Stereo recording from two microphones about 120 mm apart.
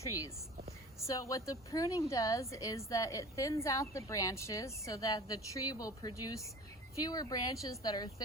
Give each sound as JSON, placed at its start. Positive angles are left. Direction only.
{"t": 0.0, "sound": "a woman's voice", "side_deg": 30}